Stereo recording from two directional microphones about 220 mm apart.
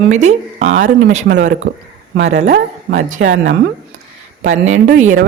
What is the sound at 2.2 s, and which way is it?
Speech, 30° right (ahead or behind).